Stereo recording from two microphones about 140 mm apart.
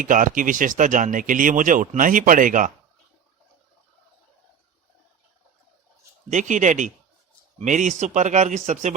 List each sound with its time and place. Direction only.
0.0 s speech: 70° right (ahead or behind)
6.3 s speech: 65° right (ahead or behind)